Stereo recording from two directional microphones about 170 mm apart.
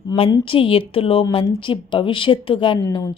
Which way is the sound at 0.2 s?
30° left (ahead or behind).